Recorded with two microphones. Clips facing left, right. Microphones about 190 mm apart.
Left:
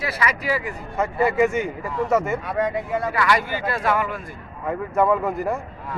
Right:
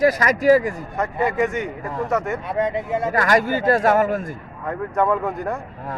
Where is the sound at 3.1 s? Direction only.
45° right (ahead or behind).